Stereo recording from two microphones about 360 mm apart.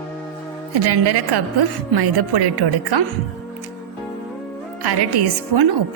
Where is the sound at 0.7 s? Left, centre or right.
Right.